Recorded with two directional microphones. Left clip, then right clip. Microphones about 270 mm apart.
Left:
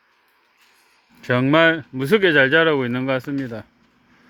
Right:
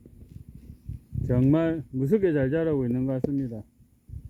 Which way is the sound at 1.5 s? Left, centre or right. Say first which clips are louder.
Left 10 dB; centre.